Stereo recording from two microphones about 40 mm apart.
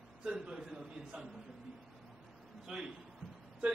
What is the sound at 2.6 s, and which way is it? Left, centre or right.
Speech, centre.